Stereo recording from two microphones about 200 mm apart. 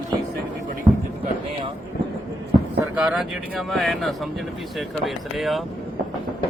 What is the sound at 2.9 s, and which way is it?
Speech, 5° right (ahead or behind).